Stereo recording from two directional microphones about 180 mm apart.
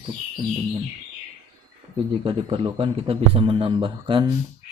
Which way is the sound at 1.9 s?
30° right (ahead or behind).